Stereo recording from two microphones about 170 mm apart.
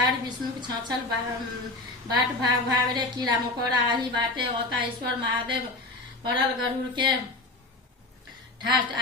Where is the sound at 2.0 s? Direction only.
25° right (ahead or behind).